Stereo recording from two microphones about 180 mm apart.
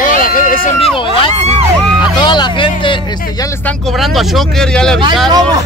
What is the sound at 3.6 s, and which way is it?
Speech, centre (ahead or behind).